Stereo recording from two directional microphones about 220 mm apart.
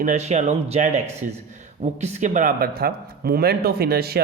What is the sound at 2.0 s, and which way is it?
A man's voice, 35° right (ahead or behind).